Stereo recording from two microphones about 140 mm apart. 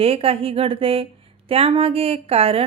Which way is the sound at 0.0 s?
45° right (ahead or behind).